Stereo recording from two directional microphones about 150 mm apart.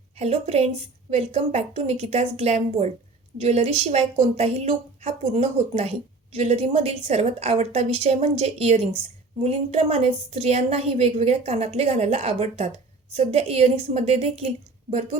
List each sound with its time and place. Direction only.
0.2 s speech: 45° right (ahead or behind)